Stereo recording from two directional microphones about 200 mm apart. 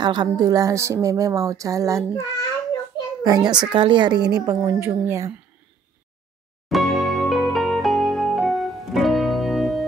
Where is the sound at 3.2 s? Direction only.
20° right (ahead or behind).